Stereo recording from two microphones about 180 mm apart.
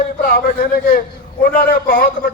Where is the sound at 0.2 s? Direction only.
50° left (ahead or behind).